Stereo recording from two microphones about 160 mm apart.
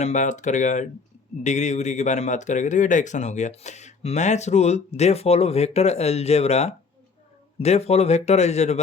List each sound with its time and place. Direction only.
0.0 s speech: 50° left (ahead or behind)